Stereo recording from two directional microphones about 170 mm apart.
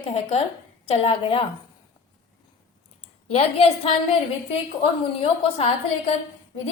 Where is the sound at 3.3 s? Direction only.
35° left (ahead or behind).